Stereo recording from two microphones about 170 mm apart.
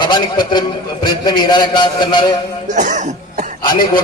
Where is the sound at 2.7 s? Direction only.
45° right (ahead or behind).